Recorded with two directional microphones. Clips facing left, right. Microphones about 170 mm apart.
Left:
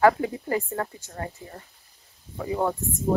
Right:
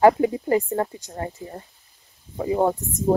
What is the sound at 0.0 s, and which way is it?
Speech, 20° right (ahead or behind).